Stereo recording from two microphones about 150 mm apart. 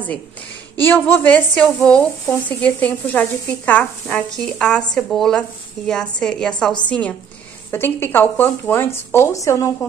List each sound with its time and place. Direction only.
0.7 s a woman's voice: 15° left (ahead or behind)